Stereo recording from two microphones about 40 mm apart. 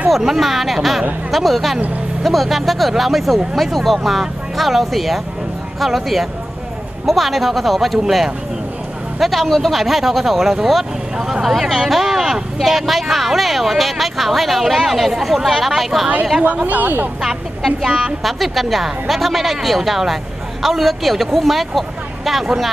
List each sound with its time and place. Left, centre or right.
0.2 s speech: centre
9.2 s speech: centre
16.6 s speech: right
17.6 s speech: centre